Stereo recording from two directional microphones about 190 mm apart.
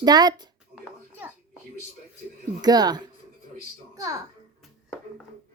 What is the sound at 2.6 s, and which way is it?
A woman's voice, 20° right (ahead or behind).